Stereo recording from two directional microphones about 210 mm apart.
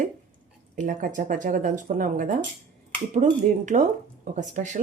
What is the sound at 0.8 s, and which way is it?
Speech, 40° right (ahead or behind).